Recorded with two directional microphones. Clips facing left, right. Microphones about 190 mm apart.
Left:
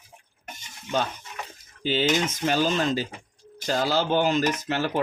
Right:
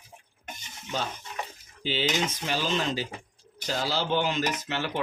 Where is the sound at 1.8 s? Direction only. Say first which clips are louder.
Left 4 dB; 50° left (ahead or behind).